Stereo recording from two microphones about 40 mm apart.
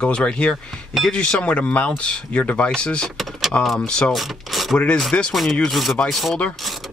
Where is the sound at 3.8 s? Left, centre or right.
Left.